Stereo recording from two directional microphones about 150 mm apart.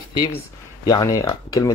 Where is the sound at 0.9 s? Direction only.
20° left (ahead or behind).